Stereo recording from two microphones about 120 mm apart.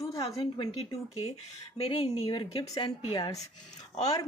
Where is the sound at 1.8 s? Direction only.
55° left (ahead or behind).